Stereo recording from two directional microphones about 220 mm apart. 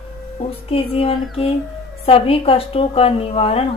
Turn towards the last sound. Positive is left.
turn(degrees=25)  # may be behind; listen again after turning